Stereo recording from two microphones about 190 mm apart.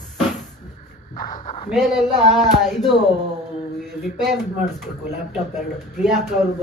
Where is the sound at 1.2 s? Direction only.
25° left (ahead or behind).